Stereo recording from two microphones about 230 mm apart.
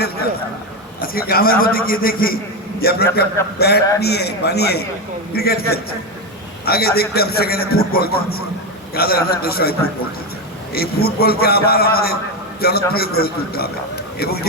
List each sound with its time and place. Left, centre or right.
1.0 s a man's voice: left
10.8 s a man's voice: left